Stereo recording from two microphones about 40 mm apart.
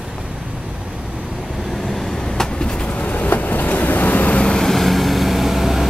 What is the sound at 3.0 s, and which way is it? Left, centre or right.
Vehicle, left.